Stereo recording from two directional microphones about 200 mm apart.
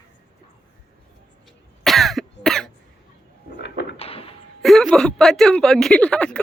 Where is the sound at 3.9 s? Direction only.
30° left (ahead or behind).